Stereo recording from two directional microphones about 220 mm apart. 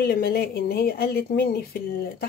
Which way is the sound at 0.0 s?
45° left (ahead or behind).